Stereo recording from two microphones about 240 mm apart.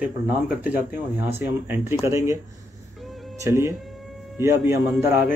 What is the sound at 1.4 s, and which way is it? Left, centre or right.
Speech, centre.